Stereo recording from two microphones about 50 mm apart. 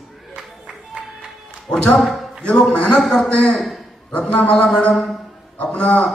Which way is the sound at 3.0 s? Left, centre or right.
Centre.